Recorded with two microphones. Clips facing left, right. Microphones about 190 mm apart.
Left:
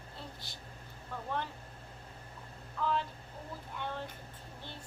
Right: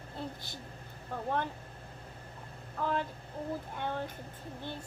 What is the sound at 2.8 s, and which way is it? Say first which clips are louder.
Speech: even; 50° right (ahead or behind).